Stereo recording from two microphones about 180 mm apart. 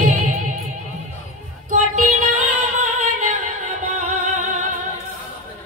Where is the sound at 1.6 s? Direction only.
40° right (ahead or behind).